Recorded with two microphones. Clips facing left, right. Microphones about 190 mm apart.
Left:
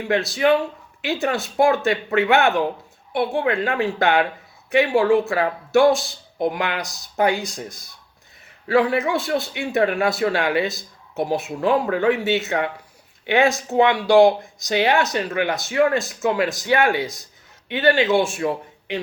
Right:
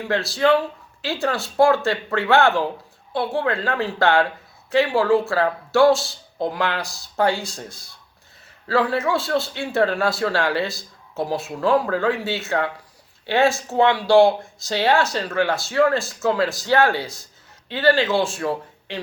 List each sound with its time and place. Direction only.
0.1 s a man's voice: 15° left (ahead or behind)